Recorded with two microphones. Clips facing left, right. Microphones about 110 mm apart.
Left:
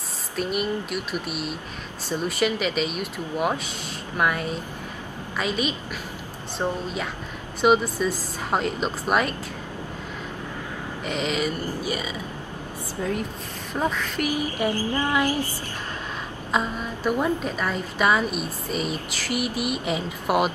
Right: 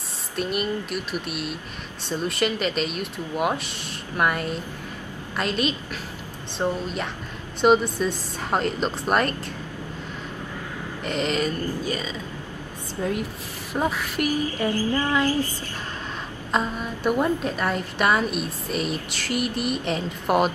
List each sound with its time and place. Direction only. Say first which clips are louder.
0.4 s a woman's voice: even; centre (ahead or behind)
11.1 s speech: right 1 dB; 5° left (ahead or behind)
13.7 s speech: right 1 dB; 10° right (ahead or behind)
14.3 s speech: left 1 dB; 15° left (ahead or behind)
16.5 s a woman's voice: right 1 dB; centre (ahead or behind)